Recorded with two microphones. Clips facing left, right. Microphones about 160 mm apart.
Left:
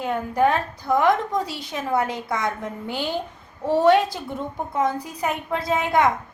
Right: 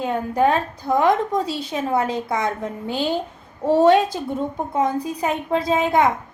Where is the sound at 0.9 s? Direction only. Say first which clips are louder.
Right 1 dB; 15° right (ahead or behind).